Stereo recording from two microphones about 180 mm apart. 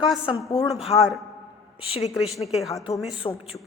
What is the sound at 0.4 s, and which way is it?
Speech, 20° left (ahead or behind).